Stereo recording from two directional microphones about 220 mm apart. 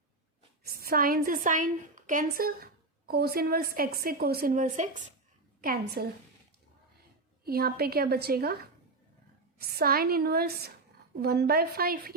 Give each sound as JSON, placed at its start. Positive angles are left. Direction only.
{"t": 0.6, "sound": "a woman's voice", "side_deg": -40}
{"t": 5.6, "sound": "a woman's voice", "side_deg": -45}
{"t": 7.4, "sound": "a woman's voice", "side_deg": -45}
{"t": 9.6, "sound": "a woman's voice", "side_deg": -45}